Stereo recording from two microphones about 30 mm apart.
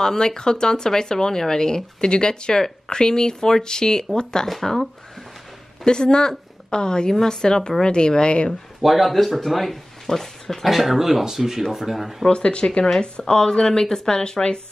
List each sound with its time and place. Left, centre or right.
0.0 s speech: centre
2.0 s speech: left
4.5 s speech: centre
5.9 s a woman's voice: left
8.8 s speech: centre
10.6 s speech: centre
12.3 s speech: left
13.2 s speech: left